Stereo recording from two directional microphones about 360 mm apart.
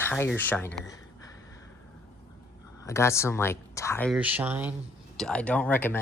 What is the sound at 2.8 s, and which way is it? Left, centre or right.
Speech, centre.